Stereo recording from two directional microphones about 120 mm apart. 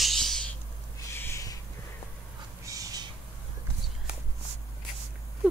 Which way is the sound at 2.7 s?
30° right (ahead or behind).